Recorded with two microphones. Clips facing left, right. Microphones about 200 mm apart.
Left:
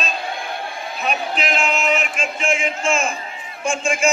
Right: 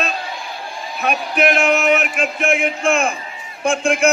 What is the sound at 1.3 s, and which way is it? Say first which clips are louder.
Speech: right 6 dB; 60° right (ahead or behind).